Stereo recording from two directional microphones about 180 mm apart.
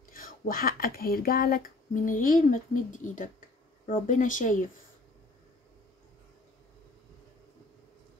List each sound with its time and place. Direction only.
0.1 s speech: 50° left (ahead or behind)